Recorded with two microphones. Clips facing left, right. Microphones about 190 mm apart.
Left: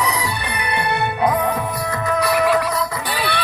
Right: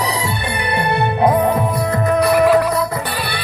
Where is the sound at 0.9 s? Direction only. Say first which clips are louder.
Right 4 dB; 30° right (ahead or behind).